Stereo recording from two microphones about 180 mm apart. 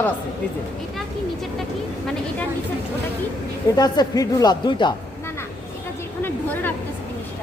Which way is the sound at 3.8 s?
20° left (ahead or behind).